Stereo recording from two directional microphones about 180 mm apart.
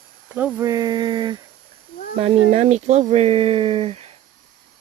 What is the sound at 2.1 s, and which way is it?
Speech, 35° right (ahead or behind).